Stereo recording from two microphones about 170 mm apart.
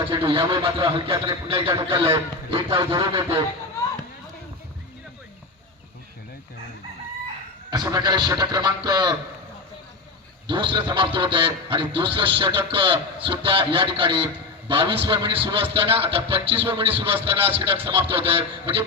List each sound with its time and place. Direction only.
0.0 s speech: 30° right (ahead or behind)
7.7 s speech: 25° right (ahead or behind)
10.5 s speech: 30° right (ahead or behind)